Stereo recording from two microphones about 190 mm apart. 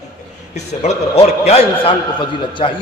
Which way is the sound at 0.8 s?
35° left (ahead or behind).